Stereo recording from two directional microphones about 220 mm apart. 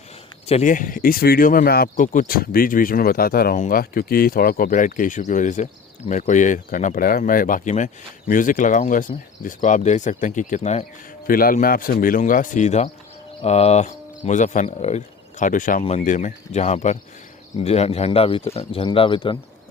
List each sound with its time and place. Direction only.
0.4 s speech: 30° left (ahead or behind)
11.3 s speech: 40° left (ahead or behind); by 19.4 s 20° left (ahead or behind)